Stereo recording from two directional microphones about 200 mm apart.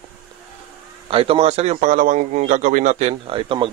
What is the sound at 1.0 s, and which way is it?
A man's voice, 30° right (ahead or behind).